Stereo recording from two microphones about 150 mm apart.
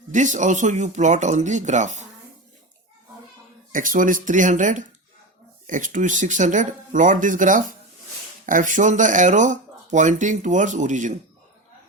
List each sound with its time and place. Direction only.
0.1 s speech: 55° right (ahead or behind)
3.7 s speech: 60° right (ahead or behind)